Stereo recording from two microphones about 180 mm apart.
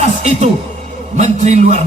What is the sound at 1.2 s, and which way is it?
Speech, 40° right (ahead or behind).